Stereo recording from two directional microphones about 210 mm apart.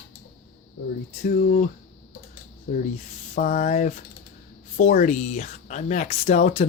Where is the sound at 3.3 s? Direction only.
35° left (ahead or behind).